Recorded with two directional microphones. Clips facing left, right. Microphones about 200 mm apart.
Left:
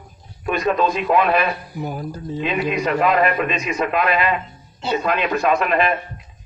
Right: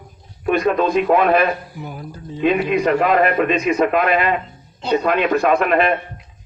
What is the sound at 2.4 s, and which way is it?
Speech, 50° right (ahead or behind).